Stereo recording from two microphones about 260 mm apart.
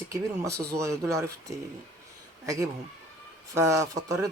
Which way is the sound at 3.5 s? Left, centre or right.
Centre.